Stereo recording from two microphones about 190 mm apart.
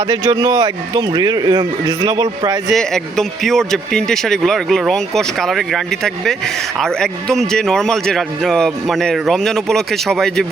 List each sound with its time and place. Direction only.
0.1 s a man's voice: 20° right (ahead or behind)
2.6 s speech: centre (ahead or behind)